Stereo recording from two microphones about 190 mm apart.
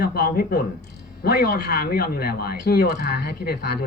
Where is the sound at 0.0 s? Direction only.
55° left (ahead or behind).